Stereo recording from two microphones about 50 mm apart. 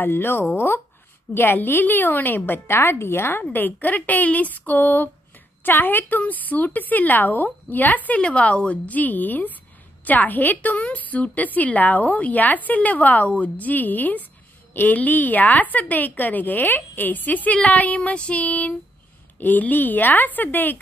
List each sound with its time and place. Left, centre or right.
0.0 s a woman's voice: left
3.5 s a woman's voice: left
18.0 s a sound: left
19.4 s a woman's voice: left